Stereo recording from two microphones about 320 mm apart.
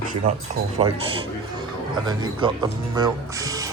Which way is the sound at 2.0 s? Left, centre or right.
Centre.